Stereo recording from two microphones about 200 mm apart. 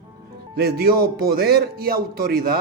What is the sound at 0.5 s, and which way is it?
A man's voice, 50° right (ahead or behind).